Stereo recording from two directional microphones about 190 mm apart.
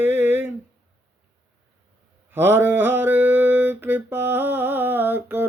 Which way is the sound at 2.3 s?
10° right (ahead or behind).